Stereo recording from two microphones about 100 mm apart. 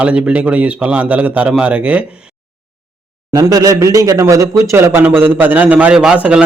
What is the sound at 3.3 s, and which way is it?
A man's voice, 35° right (ahead or behind).